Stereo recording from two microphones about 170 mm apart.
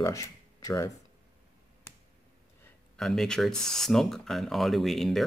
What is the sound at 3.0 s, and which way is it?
Speech, centre (ahead or behind).